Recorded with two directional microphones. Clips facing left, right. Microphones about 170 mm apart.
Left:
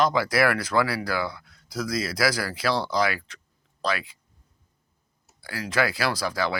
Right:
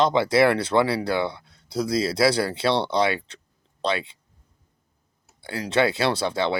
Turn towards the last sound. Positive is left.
turn(degrees=-25)  # may be behind; listen again after turning